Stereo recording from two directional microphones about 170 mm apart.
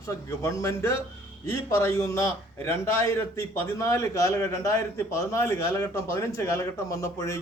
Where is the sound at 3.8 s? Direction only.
15° left (ahead or behind).